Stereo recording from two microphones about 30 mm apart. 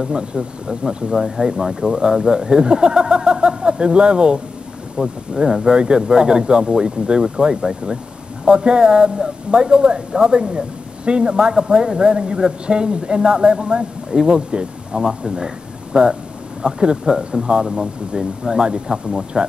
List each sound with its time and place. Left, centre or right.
0.0 s speech: right
0.8 s speech: centre
4.9 s speech: centre
5.6 s speech: right